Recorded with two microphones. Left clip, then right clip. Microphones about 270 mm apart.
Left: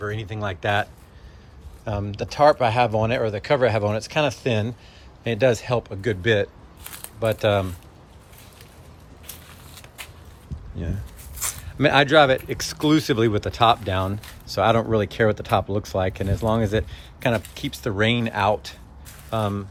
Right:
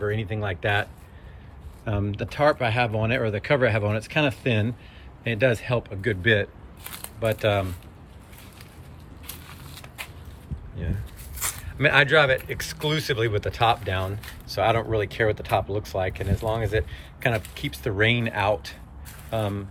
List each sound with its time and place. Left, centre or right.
0.0 s speech: centre
11.4 s speech: centre